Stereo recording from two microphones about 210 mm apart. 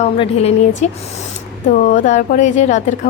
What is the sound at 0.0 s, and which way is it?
A woman's voice, 30° left (ahead or behind).